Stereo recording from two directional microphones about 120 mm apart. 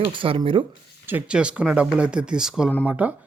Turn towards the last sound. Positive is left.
turn(degrees=-15)  # may be behind; listen again after turning